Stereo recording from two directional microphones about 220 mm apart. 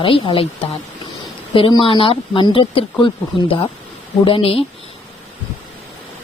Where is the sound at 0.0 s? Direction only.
25° left (ahead or behind).